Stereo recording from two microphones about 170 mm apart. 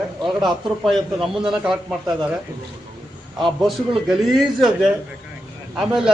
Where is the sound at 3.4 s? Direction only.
Centre (ahead or behind).